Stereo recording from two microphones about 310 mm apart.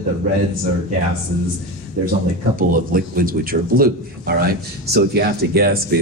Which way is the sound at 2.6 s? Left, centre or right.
Right.